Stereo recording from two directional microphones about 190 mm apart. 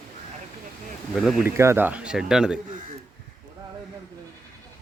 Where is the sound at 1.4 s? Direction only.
15° right (ahead or behind).